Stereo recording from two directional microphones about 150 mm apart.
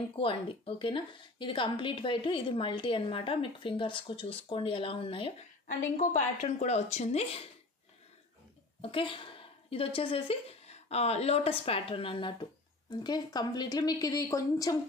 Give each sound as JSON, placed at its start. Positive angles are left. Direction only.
{"t": 0.1, "sound": "a woman's voice", "side_deg": 35}
{"t": 5.7, "sound": "a woman's voice", "side_deg": 60}
{"t": 8.8, "sound": "a woman's voice", "side_deg": 35}